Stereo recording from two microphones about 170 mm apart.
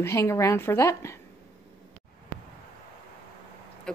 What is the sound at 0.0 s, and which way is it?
A woman's voice, 15° left (ahead or behind).